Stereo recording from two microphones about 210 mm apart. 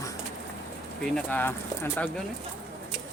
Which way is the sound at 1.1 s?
10° left (ahead or behind).